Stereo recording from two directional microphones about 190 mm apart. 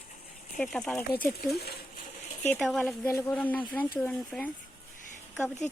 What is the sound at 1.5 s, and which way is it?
Speech, 55° left (ahead or behind).